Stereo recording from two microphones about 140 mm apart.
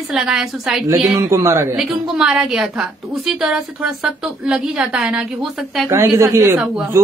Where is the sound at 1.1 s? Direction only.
20° right (ahead or behind).